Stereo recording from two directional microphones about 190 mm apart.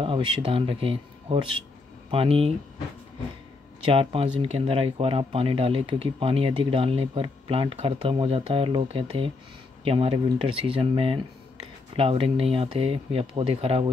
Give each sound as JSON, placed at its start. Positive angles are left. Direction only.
{"t": 0.0, "sound": "speech", "side_deg": -25}
{"t": 3.9, "sound": "speech", "side_deg": -30}